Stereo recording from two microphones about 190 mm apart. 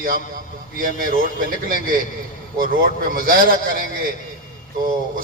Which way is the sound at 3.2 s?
50° right (ahead or behind).